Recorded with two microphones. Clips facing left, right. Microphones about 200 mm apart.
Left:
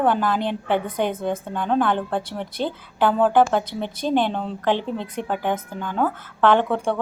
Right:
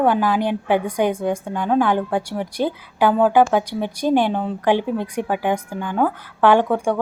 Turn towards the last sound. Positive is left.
turn(degrees=-10)  # may be behind; listen again after turning